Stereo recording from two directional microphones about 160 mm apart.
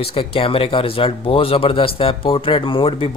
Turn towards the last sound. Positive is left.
turn(degrees=35)  # may be behind; listen again after turning